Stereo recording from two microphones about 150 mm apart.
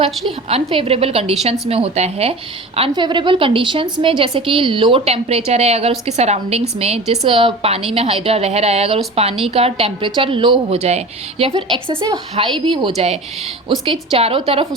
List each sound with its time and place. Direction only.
0.4 s speech: 40° right (ahead or behind)
2.9 s a woman's voice: 30° right (ahead or behind)